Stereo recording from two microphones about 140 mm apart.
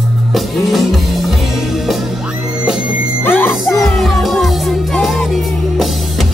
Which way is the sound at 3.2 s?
15° left (ahead or behind).